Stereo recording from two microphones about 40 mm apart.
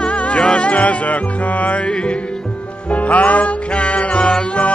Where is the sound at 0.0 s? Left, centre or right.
Left.